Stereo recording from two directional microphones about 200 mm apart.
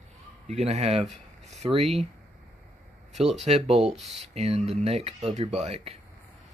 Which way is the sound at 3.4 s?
30° right (ahead or behind).